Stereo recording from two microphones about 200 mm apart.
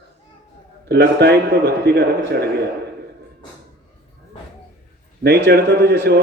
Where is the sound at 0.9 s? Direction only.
55° right (ahead or behind).